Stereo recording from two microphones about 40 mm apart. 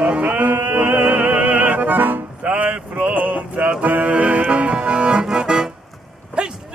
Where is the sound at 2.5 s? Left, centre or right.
Right.